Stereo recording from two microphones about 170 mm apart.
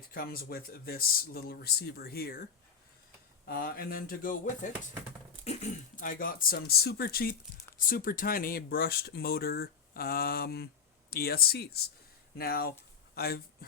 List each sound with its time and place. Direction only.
0.1 s speech: 60° left (ahead or behind)